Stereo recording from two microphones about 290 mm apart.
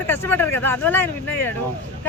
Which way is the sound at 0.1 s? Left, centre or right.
Centre.